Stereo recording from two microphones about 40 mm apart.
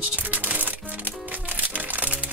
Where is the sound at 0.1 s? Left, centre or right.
Right.